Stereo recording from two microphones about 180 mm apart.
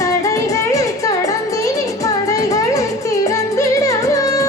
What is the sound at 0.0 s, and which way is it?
Music, 20° left (ahead or behind).